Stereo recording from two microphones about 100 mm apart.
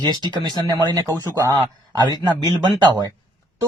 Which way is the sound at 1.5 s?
50° right (ahead or behind).